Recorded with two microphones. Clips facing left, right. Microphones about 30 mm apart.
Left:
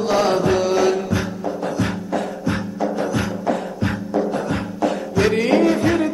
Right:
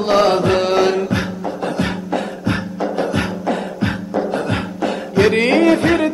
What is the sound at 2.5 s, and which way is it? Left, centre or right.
Music, right.